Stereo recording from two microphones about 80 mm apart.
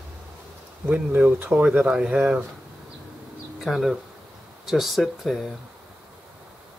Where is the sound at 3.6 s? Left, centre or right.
Centre.